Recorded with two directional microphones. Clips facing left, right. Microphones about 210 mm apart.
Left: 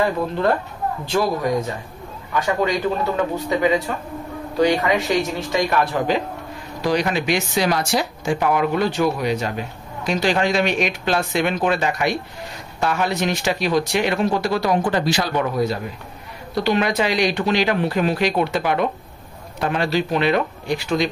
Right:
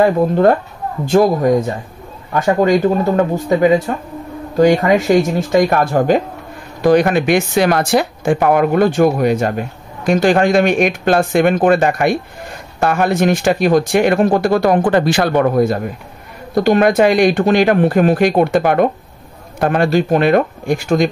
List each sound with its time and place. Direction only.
0.0 s speech: 50° right (ahead or behind)